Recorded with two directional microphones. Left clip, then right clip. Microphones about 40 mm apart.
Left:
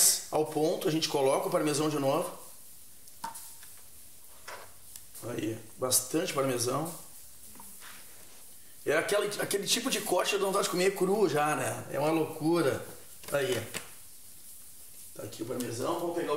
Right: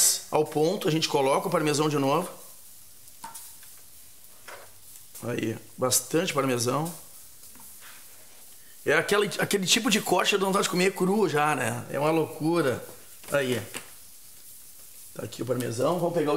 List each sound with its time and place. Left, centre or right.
0.0 s speech: right
3.2 s stir: right
4.5 s stir: right
5.2 s speech: right
8.8 s speech: right
15.1 s speech: right